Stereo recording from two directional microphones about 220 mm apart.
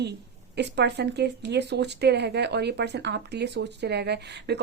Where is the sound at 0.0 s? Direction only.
50° right (ahead or behind).